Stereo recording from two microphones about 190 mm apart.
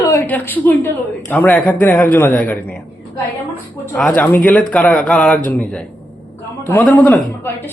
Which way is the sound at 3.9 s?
5° left (ahead or behind).